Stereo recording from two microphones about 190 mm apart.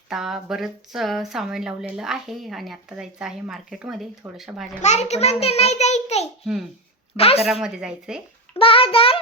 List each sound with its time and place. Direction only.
0.1 s speech: centre (ahead or behind)
4.8 s a child's voice: 35° left (ahead or behind)
6.4 s speech: centre (ahead or behind)
7.2 s a child's voice: 30° left (ahead or behind)
7.6 s speech: 5° right (ahead or behind)
8.5 s child singing: 30° left (ahead or behind)